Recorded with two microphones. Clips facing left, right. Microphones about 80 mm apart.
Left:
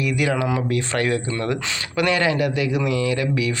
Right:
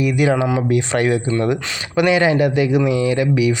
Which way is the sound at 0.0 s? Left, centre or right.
Right.